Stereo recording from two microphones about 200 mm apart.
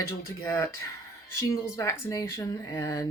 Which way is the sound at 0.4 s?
15° left (ahead or behind).